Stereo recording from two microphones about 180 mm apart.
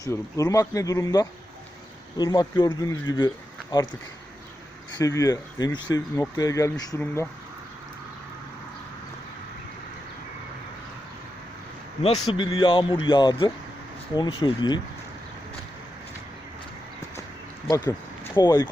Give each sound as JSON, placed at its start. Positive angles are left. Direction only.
{"t": 0.0, "sound": "speech", "side_deg": 20}
{"t": 4.9, "sound": "speech", "side_deg": 20}
{"t": 12.2, "sound": "speech", "side_deg": 30}
{"t": 17.7, "sound": "speech", "side_deg": 25}